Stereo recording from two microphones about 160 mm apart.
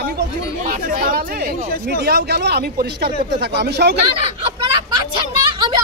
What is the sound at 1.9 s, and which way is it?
Speech, 90° right.